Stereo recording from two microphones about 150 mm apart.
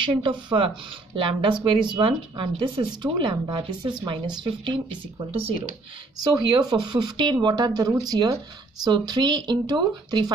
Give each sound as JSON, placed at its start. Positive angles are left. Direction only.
{"t": 0.0, "sound": "speech", "side_deg": -35}
{"t": 6.2, "sound": "speech", "side_deg": -30}